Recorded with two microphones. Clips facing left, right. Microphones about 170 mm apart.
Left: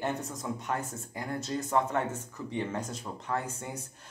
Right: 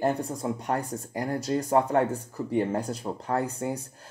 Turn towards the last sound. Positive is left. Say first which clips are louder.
# right 9 dB
turn(degrees=-35)  # may be behind; listen again after turning